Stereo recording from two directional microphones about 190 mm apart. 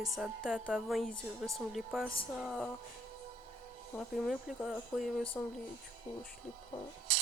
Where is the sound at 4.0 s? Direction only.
Centre (ahead or behind).